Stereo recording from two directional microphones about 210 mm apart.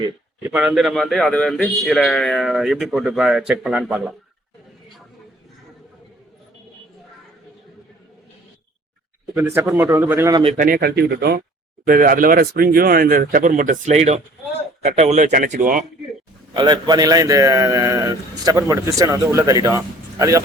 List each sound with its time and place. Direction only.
0.5 s a man's voice: 5° right (ahead or behind)
9.3 s a man's voice: 10° right (ahead or behind)
10.4 s speech: 40° right (ahead or behind)
16.6 s a man's voice: 20° right (ahead or behind)